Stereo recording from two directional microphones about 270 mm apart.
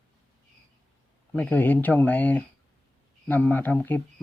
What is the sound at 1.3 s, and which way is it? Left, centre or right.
Speech, centre.